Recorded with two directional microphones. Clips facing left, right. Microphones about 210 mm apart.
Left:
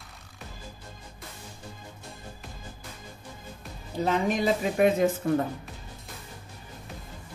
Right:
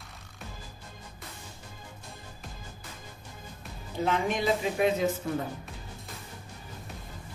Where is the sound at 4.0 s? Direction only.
35° left (ahead or behind).